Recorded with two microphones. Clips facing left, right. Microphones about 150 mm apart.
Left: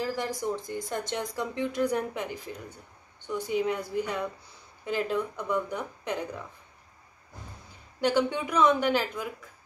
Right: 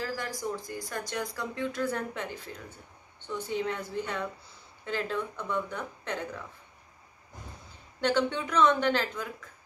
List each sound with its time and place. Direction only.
0.0 s speech: 20° left (ahead or behind)
8.0 s speech: 10° left (ahead or behind)